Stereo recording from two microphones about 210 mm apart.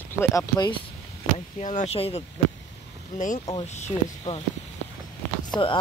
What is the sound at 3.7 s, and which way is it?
Speech, 30° left (ahead or behind).